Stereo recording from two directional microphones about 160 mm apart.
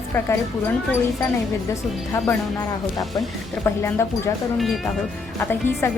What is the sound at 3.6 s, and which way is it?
Speech, 15° left (ahead or behind).